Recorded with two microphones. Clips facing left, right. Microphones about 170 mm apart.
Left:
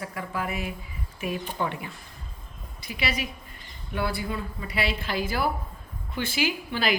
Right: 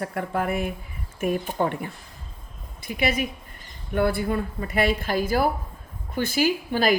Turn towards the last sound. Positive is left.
turn(degrees=-45)  # may be behind; listen again after turning